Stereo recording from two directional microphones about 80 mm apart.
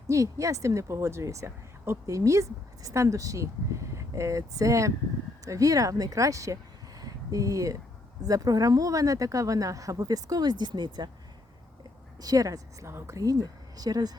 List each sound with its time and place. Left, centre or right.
0.1 s a woman's voice: right
12.2 s speech: right
12.9 s a woman's voice: right
13.1 s speech: right